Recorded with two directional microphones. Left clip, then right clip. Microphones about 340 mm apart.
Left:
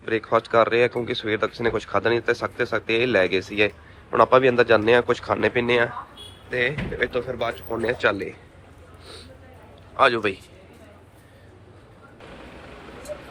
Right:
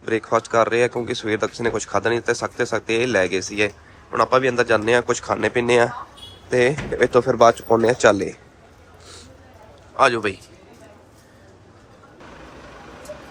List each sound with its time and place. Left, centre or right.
0.0 s speech: centre
7.7 s speech: centre
10.0 s speech: centre